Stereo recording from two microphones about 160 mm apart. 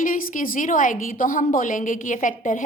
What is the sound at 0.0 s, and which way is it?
A woman's voice, 55° left (ahead or behind).